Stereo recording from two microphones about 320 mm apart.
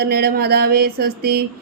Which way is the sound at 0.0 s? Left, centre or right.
Right.